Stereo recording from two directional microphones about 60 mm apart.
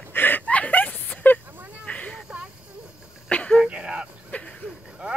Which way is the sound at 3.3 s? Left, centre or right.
Centre.